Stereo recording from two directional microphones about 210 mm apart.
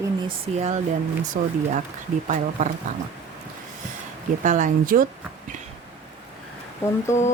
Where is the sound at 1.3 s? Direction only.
45° right (ahead or behind).